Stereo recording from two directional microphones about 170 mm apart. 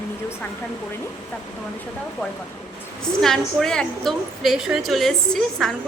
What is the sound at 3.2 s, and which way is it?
A woman's voice, 5° left (ahead or behind).